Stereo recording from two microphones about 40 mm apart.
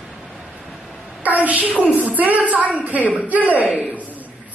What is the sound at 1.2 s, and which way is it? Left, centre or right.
A child's voice, right.